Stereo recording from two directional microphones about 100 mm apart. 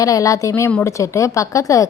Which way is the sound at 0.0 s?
35° left (ahead or behind).